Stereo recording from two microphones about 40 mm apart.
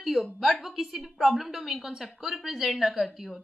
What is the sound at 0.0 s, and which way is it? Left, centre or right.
A woman's voice, centre.